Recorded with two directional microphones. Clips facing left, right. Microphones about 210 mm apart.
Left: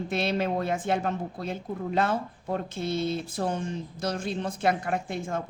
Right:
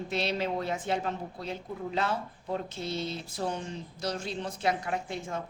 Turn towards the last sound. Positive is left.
turn(degrees=50)  # may be behind; listen again after turning